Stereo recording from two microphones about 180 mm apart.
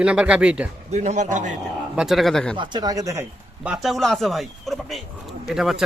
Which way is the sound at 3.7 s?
Centre (ahead or behind).